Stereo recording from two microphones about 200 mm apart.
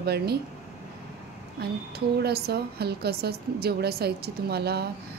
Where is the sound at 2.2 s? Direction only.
50° right (ahead or behind).